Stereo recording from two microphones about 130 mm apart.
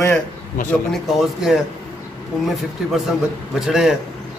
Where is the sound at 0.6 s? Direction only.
90° left.